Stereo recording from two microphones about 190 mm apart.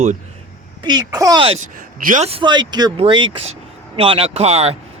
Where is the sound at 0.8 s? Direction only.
20° right (ahead or behind).